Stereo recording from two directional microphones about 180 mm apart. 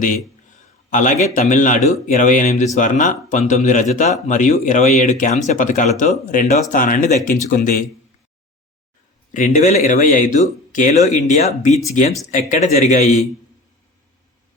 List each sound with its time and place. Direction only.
0.9 s speech: 45° left (ahead or behind)
9.3 s speech: 40° left (ahead or behind)